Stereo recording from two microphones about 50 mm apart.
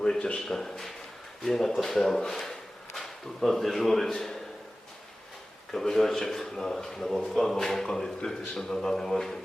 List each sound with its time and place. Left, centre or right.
0.0 s a man's voice: centre
5.7 s a man's voice: centre